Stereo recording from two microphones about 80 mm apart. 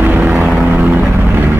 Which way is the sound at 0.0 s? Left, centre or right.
Right.